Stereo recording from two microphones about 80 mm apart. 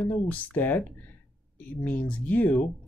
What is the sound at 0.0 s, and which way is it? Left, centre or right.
Speech, centre.